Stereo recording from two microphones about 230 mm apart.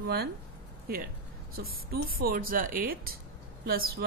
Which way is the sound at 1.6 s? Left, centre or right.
Right.